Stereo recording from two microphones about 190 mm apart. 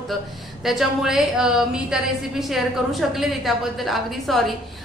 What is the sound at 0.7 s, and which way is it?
A woman's voice, centre (ahead or behind).